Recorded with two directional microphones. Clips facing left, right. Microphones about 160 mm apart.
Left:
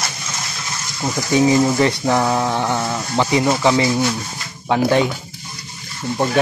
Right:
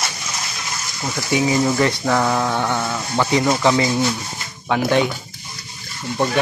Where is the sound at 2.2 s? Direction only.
15° left (ahead or behind).